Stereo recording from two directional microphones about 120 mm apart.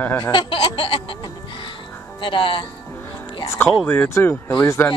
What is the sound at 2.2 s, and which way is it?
Speech, 45° left (ahead or behind).